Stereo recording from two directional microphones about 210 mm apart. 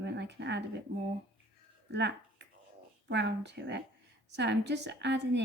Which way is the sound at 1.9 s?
55° right (ahead or behind).